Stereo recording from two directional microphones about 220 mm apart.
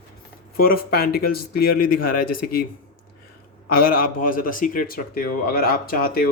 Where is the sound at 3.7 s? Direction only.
40° left (ahead or behind).